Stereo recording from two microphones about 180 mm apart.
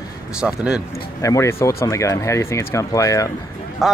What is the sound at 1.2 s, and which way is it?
Speech, 15° left (ahead or behind).